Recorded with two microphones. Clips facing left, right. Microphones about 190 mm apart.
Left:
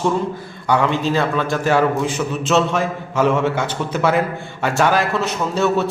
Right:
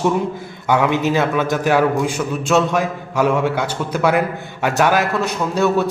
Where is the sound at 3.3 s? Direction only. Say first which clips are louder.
Even; centre (ahead or behind).